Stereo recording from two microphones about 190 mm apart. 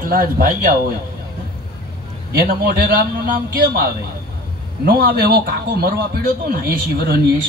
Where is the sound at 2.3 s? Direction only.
50° right (ahead or behind).